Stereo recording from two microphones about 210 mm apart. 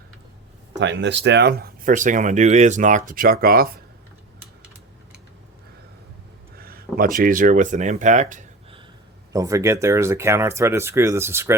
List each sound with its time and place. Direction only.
0.7 s speech: 60° right (ahead or behind)
6.6 s speech: 45° right (ahead or behind)
9.3 s speech: 15° right (ahead or behind)